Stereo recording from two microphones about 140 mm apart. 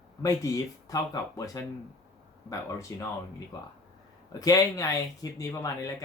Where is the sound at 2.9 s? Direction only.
20° left (ahead or behind).